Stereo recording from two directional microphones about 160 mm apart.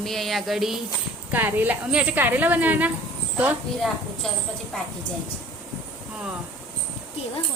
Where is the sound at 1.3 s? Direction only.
10° right (ahead or behind).